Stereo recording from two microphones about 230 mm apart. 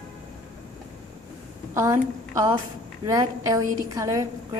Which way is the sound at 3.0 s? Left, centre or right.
Centre.